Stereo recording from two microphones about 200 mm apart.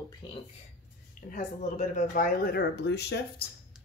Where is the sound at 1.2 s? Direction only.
40° left (ahead or behind); by 3.2 s 55° left (ahead or behind).